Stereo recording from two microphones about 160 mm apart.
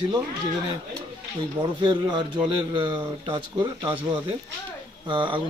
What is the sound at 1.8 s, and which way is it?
A man's voice, 30° right (ahead or behind).